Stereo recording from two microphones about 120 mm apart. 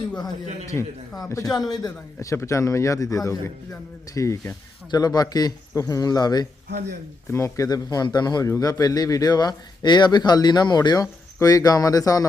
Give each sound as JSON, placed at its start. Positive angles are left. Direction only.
{"t": 1.3, "sound": "a man's voice", "side_deg": 30}
{"t": 2.1, "sound": "a man's voice", "side_deg": 20}